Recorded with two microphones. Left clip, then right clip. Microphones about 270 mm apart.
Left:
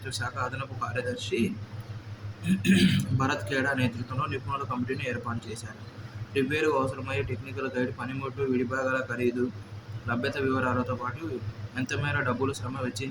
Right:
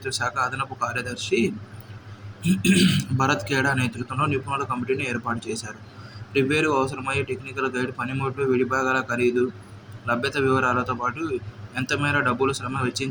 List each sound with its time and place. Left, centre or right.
0.0 s a man's voice: centre
6.3 s a man's voice: centre